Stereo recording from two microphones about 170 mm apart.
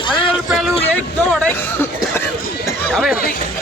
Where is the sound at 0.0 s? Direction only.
30° left (ahead or behind).